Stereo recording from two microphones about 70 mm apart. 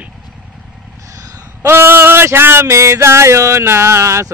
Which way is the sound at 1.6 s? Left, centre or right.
Right.